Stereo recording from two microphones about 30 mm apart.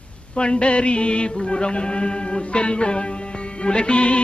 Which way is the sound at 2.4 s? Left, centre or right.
Left.